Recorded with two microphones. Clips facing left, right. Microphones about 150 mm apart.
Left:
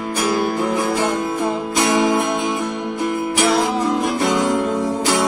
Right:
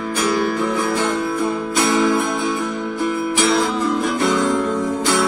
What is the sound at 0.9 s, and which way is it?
Music, 20° left (ahead or behind).